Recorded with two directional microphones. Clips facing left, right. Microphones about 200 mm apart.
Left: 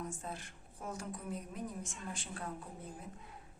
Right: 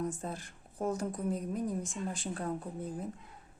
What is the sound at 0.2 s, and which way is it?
A woman's voice, 35° right (ahead or behind).